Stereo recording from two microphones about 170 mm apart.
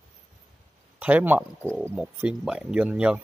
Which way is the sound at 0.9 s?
10° right (ahead or behind).